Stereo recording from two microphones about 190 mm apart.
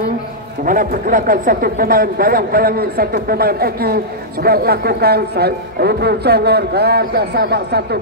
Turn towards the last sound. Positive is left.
turn(degrees=-60)  # may be behind; listen again after turning